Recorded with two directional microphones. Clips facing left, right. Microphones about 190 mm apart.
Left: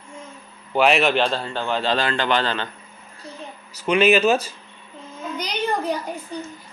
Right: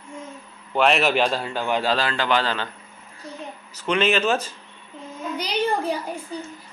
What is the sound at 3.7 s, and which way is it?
Speech, 10° left (ahead or behind).